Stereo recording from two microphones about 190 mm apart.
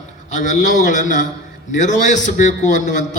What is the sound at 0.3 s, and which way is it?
A man's voice, 40° left (ahead or behind).